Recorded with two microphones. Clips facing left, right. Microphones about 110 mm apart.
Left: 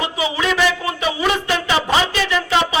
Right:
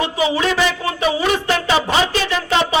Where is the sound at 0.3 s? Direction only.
35° right (ahead or behind).